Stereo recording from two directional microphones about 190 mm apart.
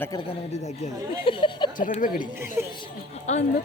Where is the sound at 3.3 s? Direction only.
40° left (ahead or behind).